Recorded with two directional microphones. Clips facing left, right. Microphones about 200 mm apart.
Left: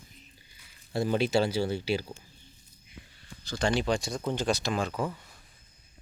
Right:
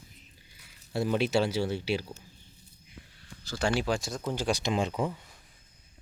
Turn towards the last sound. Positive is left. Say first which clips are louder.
# right 1 dB
turn(degrees=-25)  # may be behind; listen again after turning